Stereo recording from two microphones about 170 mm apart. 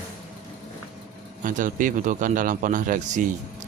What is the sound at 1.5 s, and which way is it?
Speech, 50° right (ahead or behind).